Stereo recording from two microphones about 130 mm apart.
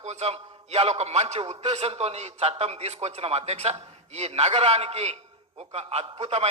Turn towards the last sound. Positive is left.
turn(degrees=-55)  # may be behind; listen again after turning